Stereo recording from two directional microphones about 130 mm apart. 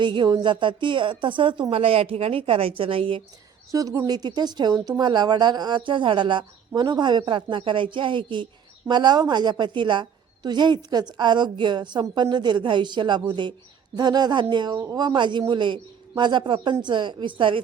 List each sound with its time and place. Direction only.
0.0 s a woman's voice: 35° right (ahead or behind)
3.7 s speech: 25° right (ahead or behind)